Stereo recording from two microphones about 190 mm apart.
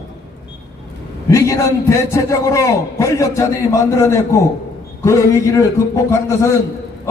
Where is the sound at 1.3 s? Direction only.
15° left (ahead or behind).